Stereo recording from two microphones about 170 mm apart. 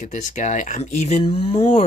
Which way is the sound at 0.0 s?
45° left (ahead or behind).